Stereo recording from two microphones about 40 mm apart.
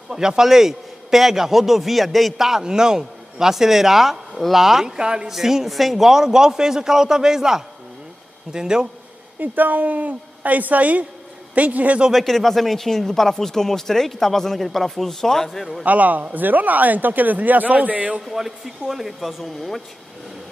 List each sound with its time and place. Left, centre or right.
0.1 s a man's voice: centre
9.4 s a man's voice: right
12.1 s speech: centre
15.8 s a man's voice: right
18.2 s speech: centre